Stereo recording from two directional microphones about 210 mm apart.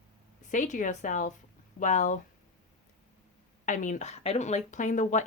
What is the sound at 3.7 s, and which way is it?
Speech, 35° left (ahead or behind).